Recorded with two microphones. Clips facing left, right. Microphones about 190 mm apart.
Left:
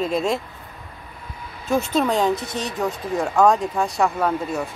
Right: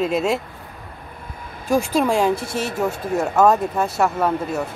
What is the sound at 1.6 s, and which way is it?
Speech, 10° right (ahead or behind).